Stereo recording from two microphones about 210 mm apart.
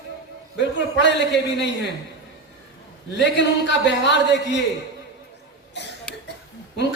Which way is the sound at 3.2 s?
55° left (ahead or behind).